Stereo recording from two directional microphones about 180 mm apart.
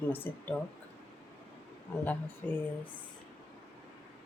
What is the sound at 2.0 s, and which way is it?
Speech, 10° left (ahead or behind).